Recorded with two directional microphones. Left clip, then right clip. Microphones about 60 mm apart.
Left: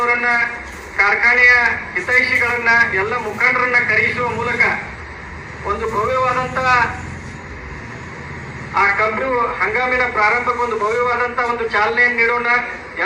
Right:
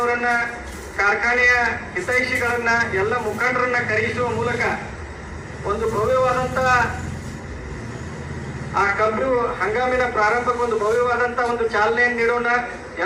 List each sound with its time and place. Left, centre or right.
0.0 s a man's voice: right
1.7 s a man's voice: right
2.9 s a man's voice: right
3.4 s a man's voice: right
4.4 s a man's voice: centre
5.6 s a man's voice: centre
8.7 s a man's voice: right
9.1 s a man's voice: centre
9.7 s a man's voice: right; by 11.1 s centre
11.1 s a man's voice: right